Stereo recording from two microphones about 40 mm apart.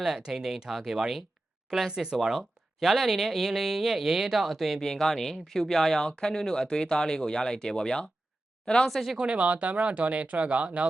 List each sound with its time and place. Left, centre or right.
0.0 s speech: centre
1.9 s speech: centre
2.8 s speech: centre
4.8 s speech: centre
6.1 s speech: centre
8.9 s speech: centre
9.1 s speech: right